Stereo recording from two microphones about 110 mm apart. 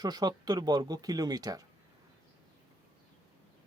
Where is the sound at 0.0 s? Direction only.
40° right (ahead or behind).